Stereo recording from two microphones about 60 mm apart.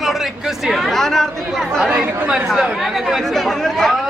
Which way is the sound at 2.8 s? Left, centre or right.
Centre.